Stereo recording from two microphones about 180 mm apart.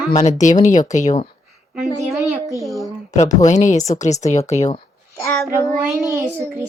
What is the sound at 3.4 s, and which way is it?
Speech, 40° left (ahead or behind).